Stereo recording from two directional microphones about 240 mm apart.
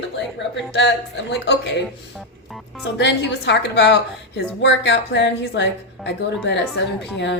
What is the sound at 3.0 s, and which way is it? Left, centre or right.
A woman's voice, left.